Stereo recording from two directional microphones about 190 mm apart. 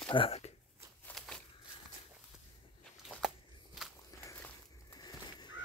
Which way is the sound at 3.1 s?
Centre (ahead or behind).